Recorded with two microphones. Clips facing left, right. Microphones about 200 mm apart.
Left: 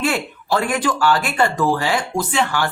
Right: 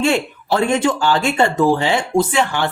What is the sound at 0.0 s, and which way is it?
Speech, 25° right (ahead or behind).